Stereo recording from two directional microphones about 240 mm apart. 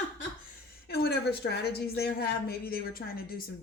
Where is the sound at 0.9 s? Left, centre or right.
Left.